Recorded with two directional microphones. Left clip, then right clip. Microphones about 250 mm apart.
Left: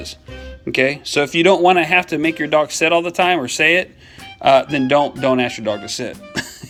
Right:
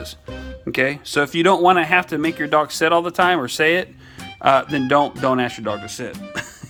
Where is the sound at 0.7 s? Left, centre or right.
Right.